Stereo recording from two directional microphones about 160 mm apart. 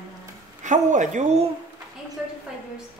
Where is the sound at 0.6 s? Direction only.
50° right (ahead or behind).